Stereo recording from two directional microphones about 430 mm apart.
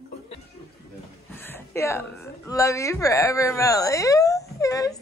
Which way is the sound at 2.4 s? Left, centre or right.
Centre.